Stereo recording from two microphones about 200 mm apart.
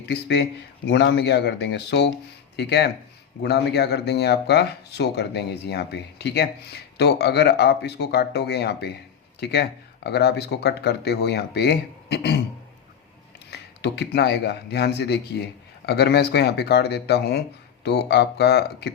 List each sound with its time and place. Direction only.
0.0 s speech: 55° left (ahead or behind)
13.5 s speech: 55° left (ahead or behind)